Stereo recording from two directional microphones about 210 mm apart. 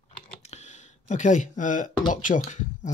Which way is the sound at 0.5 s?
35° left (ahead or behind).